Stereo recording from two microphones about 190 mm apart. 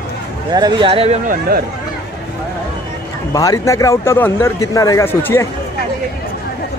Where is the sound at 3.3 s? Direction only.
20° left (ahead or behind).